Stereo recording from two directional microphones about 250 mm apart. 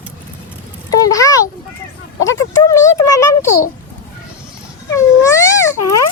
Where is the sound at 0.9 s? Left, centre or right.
Centre.